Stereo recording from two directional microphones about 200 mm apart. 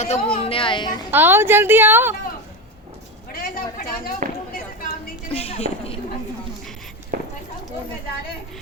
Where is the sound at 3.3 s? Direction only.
45° left (ahead or behind).